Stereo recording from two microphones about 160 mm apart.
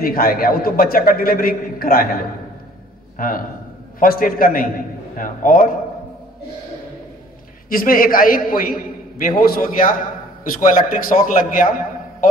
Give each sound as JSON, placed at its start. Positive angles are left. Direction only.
{"t": 0.0, "sound": "a man's voice", "side_deg": 65}
{"t": 3.2, "sound": "a man's voice", "side_deg": 60}
{"t": 7.7, "sound": "a man's voice", "side_deg": 60}